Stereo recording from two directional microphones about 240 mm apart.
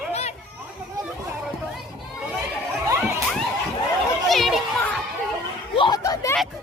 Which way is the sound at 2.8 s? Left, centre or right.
Centre.